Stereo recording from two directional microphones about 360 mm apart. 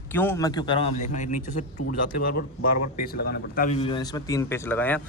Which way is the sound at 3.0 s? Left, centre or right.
Left.